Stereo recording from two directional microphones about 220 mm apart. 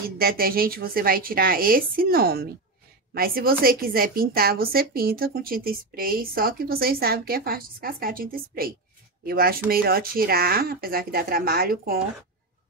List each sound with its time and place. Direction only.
0.2 s a woman's voice: 40° right (ahead or behind)